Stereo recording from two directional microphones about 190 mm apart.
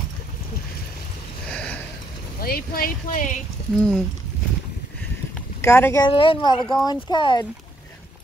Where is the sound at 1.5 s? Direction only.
5° left (ahead or behind).